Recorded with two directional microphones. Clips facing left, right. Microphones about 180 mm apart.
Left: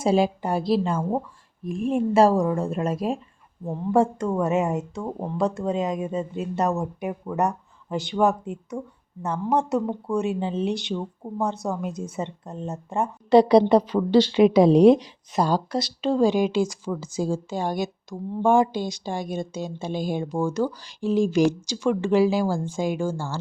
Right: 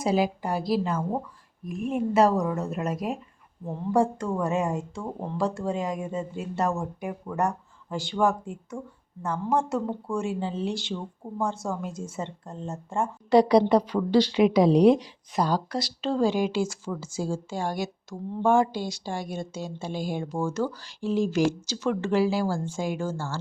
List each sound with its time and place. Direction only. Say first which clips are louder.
0.0 s speech: left 4 dB; 25° left (ahead or behind)